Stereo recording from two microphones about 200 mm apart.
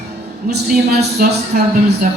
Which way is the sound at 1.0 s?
55° right (ahead or behind).